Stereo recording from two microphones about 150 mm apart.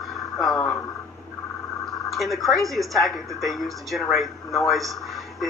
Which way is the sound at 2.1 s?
Centre (ahead or behind).